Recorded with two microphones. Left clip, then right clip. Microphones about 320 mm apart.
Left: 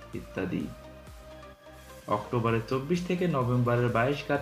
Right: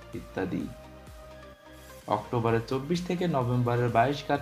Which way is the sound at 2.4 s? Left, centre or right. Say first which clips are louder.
Right 1 dB; centre.